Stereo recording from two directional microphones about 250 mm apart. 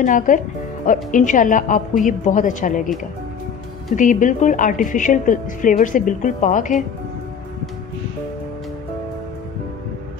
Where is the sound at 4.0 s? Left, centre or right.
Left.